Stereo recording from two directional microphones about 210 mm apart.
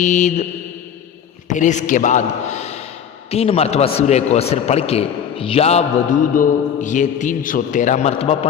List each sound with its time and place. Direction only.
0.0 s a man's voice: 35° left (ahead or behind)
1.5 s a man's voice: 35° left (ahead or behind)